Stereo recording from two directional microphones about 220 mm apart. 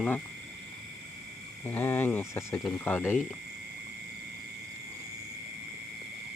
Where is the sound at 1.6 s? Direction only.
10° left (ahead or behind).